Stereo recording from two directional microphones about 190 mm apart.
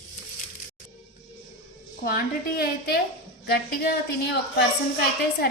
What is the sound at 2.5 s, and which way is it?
A woman's voice, 55° left (ahead or behind).